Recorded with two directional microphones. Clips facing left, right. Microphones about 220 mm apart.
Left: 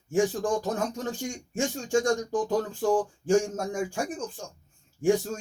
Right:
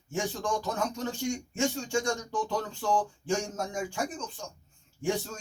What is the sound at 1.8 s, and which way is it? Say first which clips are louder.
Speech: left 6 dB; 45° left (ahead or behind).